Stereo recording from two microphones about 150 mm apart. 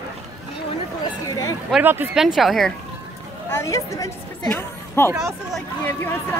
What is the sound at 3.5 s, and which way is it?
A woman's voice, 20° left (ahead or behind).